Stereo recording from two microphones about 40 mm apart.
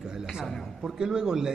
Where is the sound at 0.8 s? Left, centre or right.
Centre.